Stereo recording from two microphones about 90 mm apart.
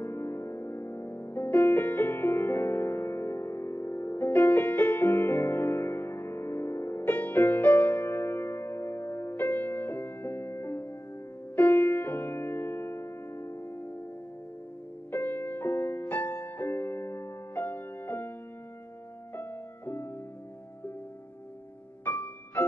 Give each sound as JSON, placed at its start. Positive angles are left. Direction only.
{"t": 0.0, "sound": "music", "side_deg": 20}
{"t": 15.0, "sound": "music", "side_deg": 20}
{"t": 17.6, "sound": "music", "side_deg": 15}
{"t": 19.3, "sound": "music", "side_deg": 20}
{"t": 22.0, "sound": "music", "side_deg": 15}